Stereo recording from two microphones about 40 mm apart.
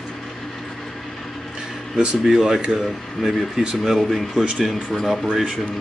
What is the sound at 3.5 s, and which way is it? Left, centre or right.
Speech, centre.